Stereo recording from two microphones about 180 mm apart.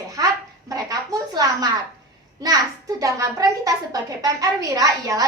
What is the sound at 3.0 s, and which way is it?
A woman's voice, 20° right (ahead or behind).